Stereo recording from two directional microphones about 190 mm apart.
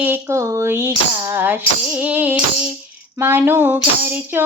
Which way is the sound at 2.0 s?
10° right (ahead or behind).